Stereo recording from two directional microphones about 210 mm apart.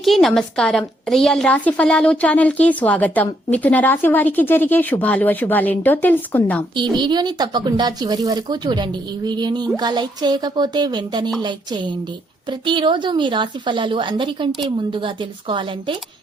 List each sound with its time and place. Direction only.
0.0 s a woman's voice: centre (ahead or behind)
6.9 s speech: 20° right (ahead or behind)
12.5 s speech: 20° right (ahead or behind)